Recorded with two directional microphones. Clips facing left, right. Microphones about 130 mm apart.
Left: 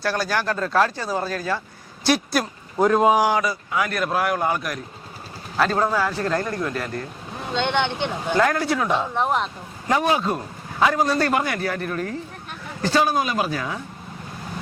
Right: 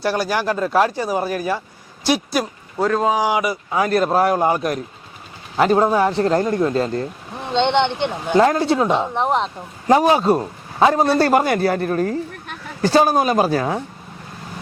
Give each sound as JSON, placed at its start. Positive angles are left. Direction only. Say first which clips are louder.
{"t": 0.0, "sound": "speech", "louder": "right 4 dB", "side_deg": -15}
{"t": 2.0, "sound": "speech", "louder": "right 2 dB", "side_deg": -5}
{"t": 2.7, "sound": "speech", "louder": "left 1 dB", "side_deg": 10}
{"t": 3.2, "sound": "speech", "louder": "right 2 dB", "side_deg": -15}
{"t": 3.7, "sound": "a man's voice", "louder": "right 6 dB", "side_deg": -30}